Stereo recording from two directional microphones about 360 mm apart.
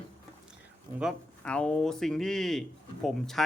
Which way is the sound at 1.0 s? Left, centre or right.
Centre.